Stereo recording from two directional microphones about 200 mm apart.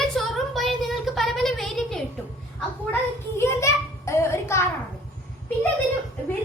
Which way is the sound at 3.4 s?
15° left (ahead or behind).